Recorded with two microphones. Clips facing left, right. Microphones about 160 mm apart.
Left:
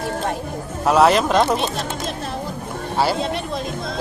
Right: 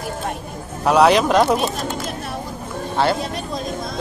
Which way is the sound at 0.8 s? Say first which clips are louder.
Right 1 dB; centre (ahead or behind).